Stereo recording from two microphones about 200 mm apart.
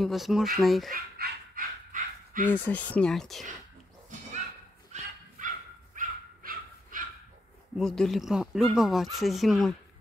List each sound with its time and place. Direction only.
0.0 s speech: centre (ahead or behind)
0.9 s dog: 50° right (ahead or behind)
2.4 s speech: 10° left (ahead or behind)
4.9 s dog: 35° right (ahead or behind)
7.8 s speech: centre (ahead or behind)